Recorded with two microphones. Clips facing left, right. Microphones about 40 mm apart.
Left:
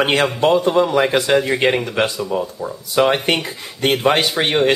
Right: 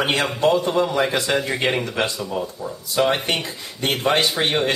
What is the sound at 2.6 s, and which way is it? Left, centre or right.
Speech, left.